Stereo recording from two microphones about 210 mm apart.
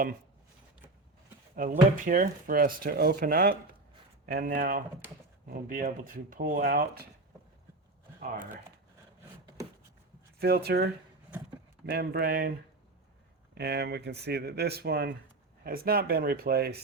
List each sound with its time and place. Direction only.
1.5 s speech: 40° right (ahead or behind)
8.2 s speech: 40° right (ahead or behind)
10.4 s speech: 50° right (ahead or behind)